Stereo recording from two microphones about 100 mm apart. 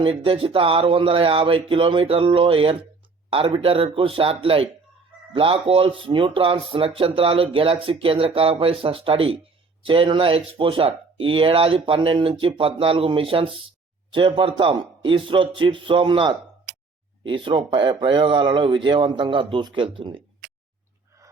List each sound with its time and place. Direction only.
0.0 s speech: 60° right (ahead or behind)